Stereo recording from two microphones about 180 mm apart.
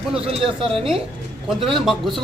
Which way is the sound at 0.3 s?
30° right (ahead or behind).